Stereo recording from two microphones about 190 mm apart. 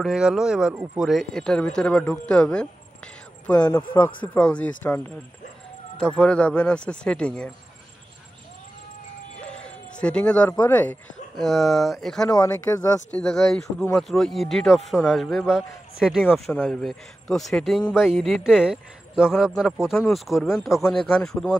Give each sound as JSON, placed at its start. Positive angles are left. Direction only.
{"t": 0.0, "sound": "speech", "side_deg": -5}
{"t": 9.5, "sound": "speech", "side_deg": 5}
{"t": 12.3, "sound": "speech", "side_deg": 20}
{"t": 13.1, "sound": "speech", "side_deg": 5}